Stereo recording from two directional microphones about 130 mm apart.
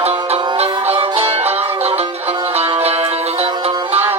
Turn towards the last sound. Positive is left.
turn(degrees=-50)  # may be behind; listen again after turning